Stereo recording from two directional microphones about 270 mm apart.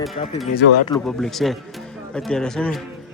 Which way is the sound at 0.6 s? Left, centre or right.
Left.